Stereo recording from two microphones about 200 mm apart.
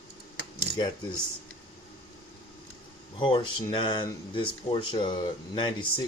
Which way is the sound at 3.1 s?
25° left (ahead or behind).